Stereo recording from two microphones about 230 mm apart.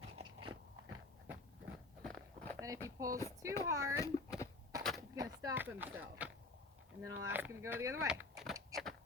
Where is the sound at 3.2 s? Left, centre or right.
Centre.